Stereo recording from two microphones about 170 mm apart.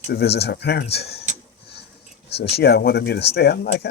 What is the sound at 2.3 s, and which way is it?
Speech, 70° left (ahead or behind).